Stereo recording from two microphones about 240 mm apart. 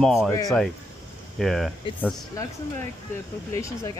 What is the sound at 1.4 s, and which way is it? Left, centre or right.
Speech, centre.